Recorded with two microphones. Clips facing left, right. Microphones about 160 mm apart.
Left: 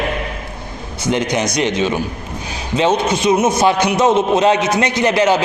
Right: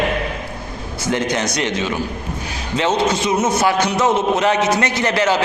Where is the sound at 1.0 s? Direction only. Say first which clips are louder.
Left 2 dB; 20° left (ahead or behind).